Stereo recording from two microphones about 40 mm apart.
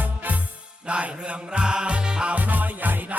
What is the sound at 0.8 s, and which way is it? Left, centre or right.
Music, right.